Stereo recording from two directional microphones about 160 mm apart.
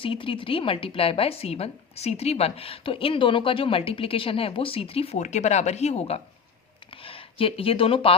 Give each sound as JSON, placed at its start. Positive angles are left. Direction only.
{"t": 0.0, "sound": "a woman's voice", "side_deg": 35}